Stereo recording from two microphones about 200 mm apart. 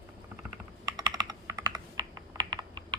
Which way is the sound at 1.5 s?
20° right (ahead or behind).